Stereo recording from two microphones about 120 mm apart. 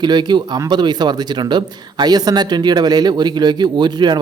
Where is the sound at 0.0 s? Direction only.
35° right (ahead or behind).